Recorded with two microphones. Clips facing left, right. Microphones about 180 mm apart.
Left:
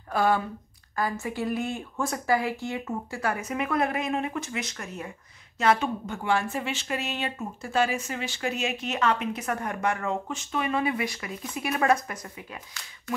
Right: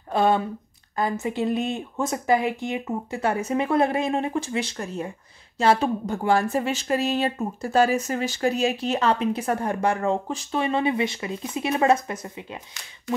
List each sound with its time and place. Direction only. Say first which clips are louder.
0.1 s a woman's voice: right 3 dB; 25° right (ahead or behind)